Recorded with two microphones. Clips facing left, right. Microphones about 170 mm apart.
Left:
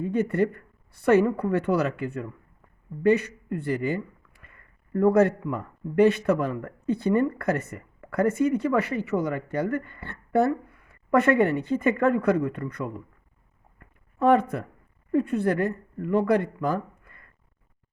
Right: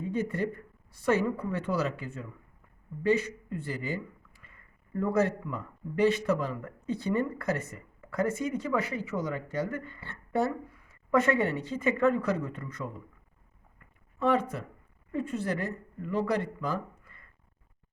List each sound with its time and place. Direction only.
0.0 s speech: 60° left (ahead or behind)
13.7 s a sound: 55° left (ahead or behind)
15.1 s speech: 55° left (ahead or behind)